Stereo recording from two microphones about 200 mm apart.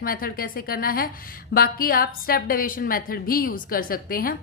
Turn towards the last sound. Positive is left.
turn(degrees=45)  # may be behind; listen again after turning